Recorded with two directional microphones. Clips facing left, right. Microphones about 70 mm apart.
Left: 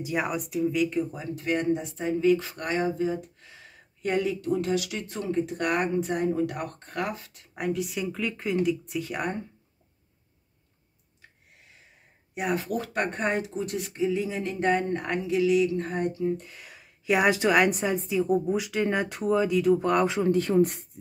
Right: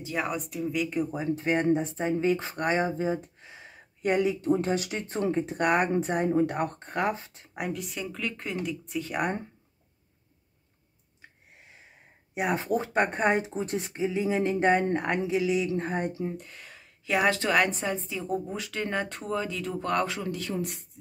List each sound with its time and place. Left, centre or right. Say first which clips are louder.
0.0 s speech: left 2 dB; centre
1.1 s speech: right 2 dB; right
4.5 s speech: right 1 dB; right
7.5 s speech: left 4 dB; centre
12.4 s speech: right 1 dB; right
16.3 s speech: even; centre
20.2 s speech: left 10 dB; left